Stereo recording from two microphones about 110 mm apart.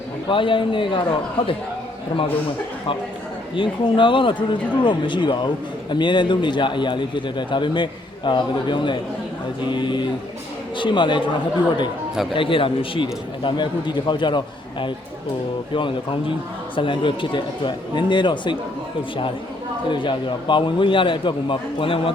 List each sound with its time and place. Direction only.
0.3 s a man's voice: 50° left (ahead or behind)
3.5 s a man's voice: 50° left (ahead or behind)
19.9 s a man's voice: 45° left (ahead or behind)